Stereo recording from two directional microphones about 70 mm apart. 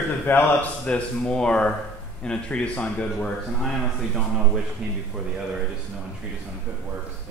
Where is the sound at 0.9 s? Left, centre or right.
Centre.